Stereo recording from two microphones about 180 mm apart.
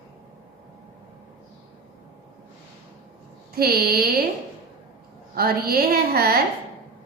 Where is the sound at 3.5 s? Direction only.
60° right (ahead or behind).